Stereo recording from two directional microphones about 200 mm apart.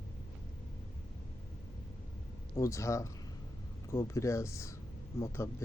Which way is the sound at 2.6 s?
15° left (ahead or behind).